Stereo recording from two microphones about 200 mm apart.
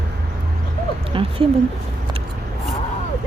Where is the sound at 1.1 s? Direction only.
25° right (ahead or behind).